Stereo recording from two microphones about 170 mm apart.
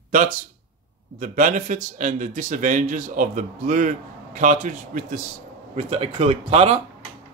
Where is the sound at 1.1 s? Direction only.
50° right (ahead or behind).